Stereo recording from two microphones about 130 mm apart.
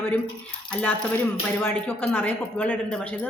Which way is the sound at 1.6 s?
15° left (ahead or behind).